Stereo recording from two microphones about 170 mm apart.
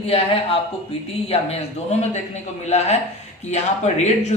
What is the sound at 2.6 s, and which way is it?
Speech, 40° left (ahead or behind).